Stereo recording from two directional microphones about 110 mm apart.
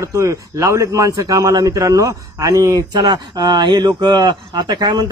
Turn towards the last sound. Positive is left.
turn(degrees=-40)  # may be behind; listen again after turning